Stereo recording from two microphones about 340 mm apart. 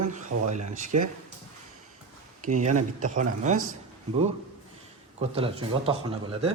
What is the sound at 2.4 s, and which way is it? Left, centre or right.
Speech, right.